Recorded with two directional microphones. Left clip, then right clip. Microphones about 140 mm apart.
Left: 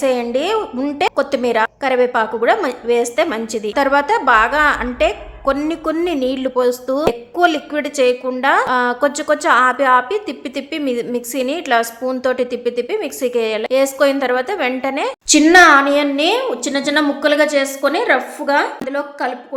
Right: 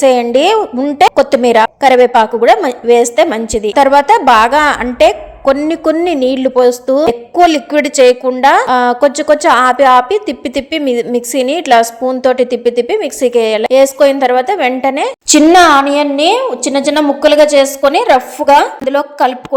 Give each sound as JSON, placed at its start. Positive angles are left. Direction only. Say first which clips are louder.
{"t": 0.0, "sound": "a woman's voice", "louder": "right 9 dB", "side_deg": -40}
{"t": 7.4, "sound": "a woman's voice", "louder": "right 6 dB", "side_deg": -40}